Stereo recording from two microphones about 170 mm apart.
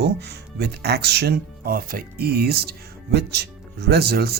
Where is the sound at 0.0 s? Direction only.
75° right (ahead or behind).